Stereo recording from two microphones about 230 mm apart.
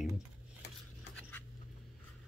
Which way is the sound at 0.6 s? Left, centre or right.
Left.